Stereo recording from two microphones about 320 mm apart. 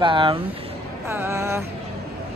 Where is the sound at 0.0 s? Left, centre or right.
Centre.